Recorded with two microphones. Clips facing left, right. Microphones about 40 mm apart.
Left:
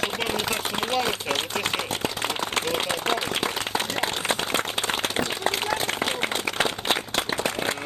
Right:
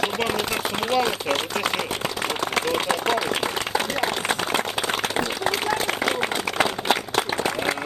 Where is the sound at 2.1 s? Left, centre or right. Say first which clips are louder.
Right 2 dB; right.